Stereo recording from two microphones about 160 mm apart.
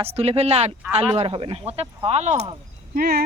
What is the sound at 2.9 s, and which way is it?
Speech, 75° right (ahead or behind).